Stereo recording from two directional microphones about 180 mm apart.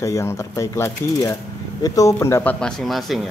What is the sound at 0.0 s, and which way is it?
Speech, 15° left (ahead or behind).